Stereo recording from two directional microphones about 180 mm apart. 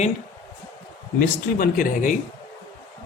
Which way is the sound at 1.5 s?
50° left (ahead or behind).